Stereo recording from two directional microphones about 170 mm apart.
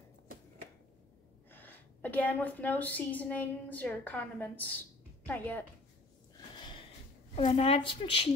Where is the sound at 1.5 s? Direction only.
10° left (ahead or behind).